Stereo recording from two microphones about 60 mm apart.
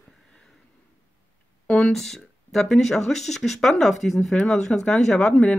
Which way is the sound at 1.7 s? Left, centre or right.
Centre.